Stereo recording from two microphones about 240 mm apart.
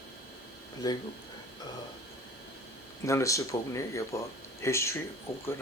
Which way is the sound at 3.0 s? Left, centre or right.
Centre.